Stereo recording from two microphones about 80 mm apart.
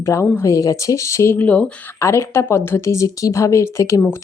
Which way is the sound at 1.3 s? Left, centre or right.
Centre.